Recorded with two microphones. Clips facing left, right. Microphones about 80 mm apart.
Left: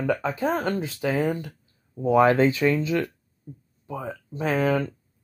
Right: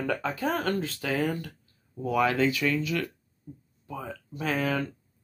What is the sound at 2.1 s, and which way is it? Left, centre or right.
Speech, left.